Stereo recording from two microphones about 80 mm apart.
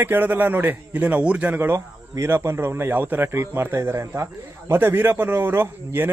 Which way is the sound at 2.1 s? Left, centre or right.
Right.